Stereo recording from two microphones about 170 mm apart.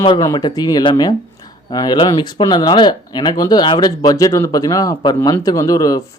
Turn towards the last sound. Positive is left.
turn(degrees=20)  # may be behind; listen again after turning